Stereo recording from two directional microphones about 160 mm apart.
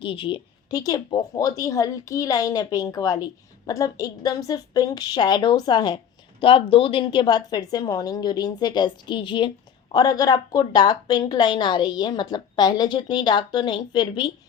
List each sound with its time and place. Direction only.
0.0 s a woman's voice: 35° left (ahead or behind)